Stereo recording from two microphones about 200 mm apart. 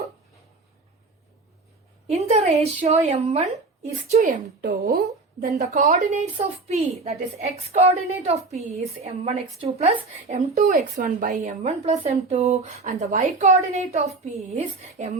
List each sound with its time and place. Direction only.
2.0 s a woman's voice: 30° right (ahead or behind); by 5.5 s 50° right (ahead or behind)
5.7 s a woman's voice: 35° right (ahead or behind)